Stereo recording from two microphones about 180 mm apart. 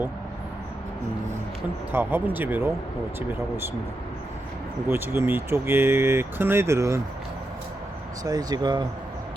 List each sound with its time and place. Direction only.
1.9 s speech: 10° right (ahead or behind)
4.9 s speech: 10° right (ahead or behind)
8.2 s speech: 20° right (ahead or behind)